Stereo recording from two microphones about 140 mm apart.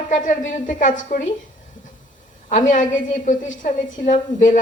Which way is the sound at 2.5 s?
65° left (ahead or behind).